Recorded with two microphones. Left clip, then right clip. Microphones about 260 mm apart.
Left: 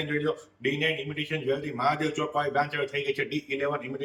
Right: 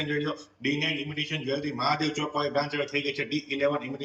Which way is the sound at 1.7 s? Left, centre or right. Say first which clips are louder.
Even; centre.